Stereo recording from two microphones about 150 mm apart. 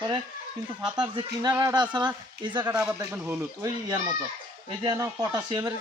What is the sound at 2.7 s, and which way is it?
Speech, 5° right (ahead or behind).